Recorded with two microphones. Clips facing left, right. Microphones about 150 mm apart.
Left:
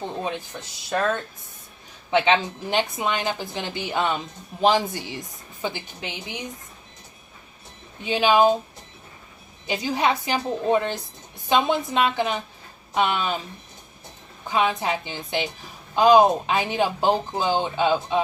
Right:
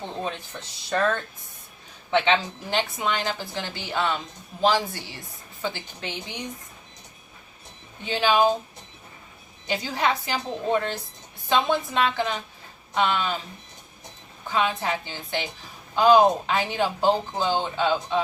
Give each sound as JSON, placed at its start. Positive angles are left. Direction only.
{"t": 0.0, "sound": "speech", "side_deg": 15}
{"t": 8.0, "sound": "speech", "side_deg": 15}
{"t": 9.6, "sound": "speech", "side_deg": 15}
{"t": 14.4, "sound": "speech", "side_deg": 15}